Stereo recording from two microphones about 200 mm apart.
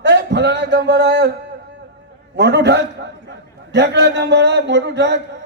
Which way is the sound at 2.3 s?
60° right (ahead or behind).